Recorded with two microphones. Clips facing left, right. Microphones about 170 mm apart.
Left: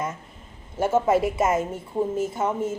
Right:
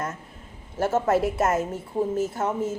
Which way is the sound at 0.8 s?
Centre (ahead or behind).